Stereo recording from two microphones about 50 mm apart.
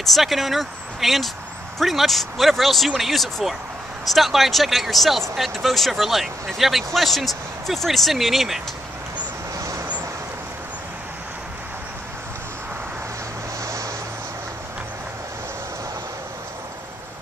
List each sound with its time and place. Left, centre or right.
0.0 s speech: centre
9.6 s vehicle: right
13.6 s vehicle: right